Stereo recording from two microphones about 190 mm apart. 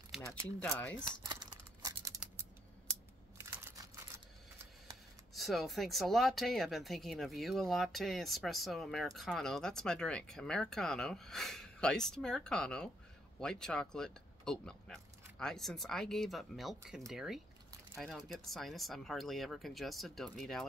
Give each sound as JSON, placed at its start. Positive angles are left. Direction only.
{"t": 0.1, "sound": "a sound", "side_deg": 0}
{"t": 0.6, "sound": "speech", "side_deg": 5}
{"t": 1.0, "sound": "tearing", "side_deg": -25}
{"t": 3.4, "sound": "crumpling", "side_deg": -15}
{"t": 5.3, "sound": "speech", "side_deg": 0}